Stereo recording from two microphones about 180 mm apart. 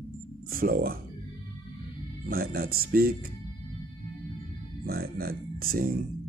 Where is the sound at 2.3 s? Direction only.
55° right (ahead or behind).